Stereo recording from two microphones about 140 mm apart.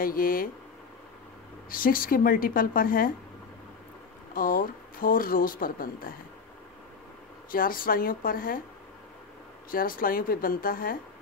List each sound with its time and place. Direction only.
0.0 s speech: 90° left
1.7 s speech: 90° left
4.3 s speech: 90° left
7.5 s speech: 90° left
9.7 s speech: 90° left